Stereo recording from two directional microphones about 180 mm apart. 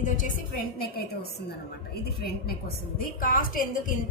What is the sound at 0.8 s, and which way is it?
A woman's voice, 60° left (ahead or behind).